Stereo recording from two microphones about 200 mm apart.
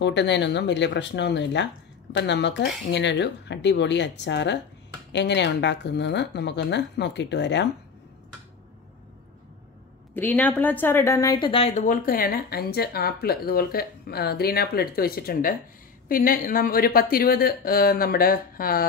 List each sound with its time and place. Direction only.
0.0 s speech: 60° left (ahead or behind)
10.1 s a woman's voice: 10° left (ahead or behind); by 11.7 s 25° left (ahead or behind)
11.7 s speech: 40° left (ahead or behind)